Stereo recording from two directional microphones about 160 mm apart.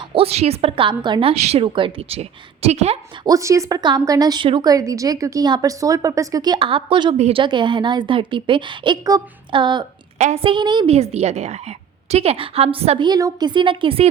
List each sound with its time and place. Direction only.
0.1 s a woman's voice: 40° right (ahead or behind)
3.2 s a woman's voice: 20° right (ahead or behind)
10.2 s a woman's voice: 50° right (ahead or behind)
10.4 s a woman's voice: 30° right (ahead or behind)
10.9 s a woman's voice: 40° right (ahead or behind)
13.1 s a woman's voice: 25° right (ahead or behind)